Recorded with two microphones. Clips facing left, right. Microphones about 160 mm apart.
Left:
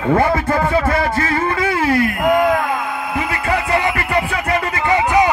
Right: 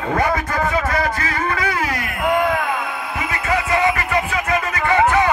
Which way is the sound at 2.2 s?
45° left (ahead or behind).